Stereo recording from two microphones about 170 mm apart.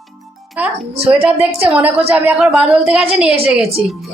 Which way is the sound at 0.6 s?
10° right (ahead or behind).